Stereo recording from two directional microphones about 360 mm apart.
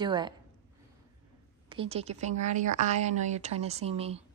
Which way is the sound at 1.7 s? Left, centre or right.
Centre.